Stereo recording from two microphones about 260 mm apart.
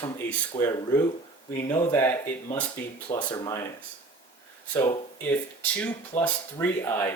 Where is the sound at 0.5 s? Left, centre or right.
Left.